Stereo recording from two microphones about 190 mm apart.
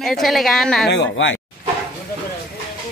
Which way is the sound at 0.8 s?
70° left (ahead or behind).